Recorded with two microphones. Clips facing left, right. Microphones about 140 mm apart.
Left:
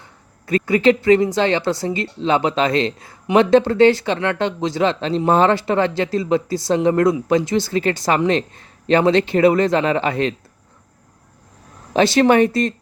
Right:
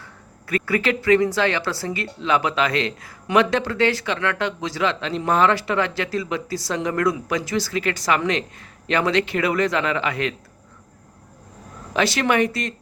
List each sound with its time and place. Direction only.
0.0 s speech: 20° left (ahead or behind)
11.9 s speech: 30° left (ahead or behind)